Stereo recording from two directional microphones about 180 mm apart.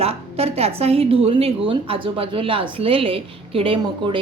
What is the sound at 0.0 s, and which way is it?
A woman's voice, 35° right (ahead or behind).